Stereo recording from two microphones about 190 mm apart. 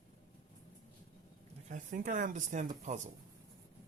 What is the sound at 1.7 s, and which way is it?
Speech, 45° right (ahead or behind).